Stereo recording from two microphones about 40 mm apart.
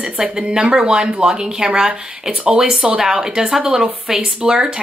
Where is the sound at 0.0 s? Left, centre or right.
Right.